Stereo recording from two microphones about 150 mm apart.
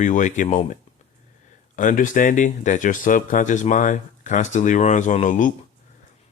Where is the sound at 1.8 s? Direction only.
60° left (ahead or behind).